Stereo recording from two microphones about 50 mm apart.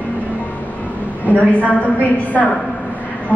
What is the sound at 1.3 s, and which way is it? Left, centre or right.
Speech, left.